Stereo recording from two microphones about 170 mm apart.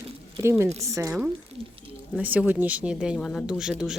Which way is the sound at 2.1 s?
10° right (ahead or behind).